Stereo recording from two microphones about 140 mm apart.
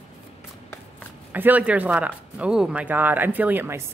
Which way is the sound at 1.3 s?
10° right (ahead or behind).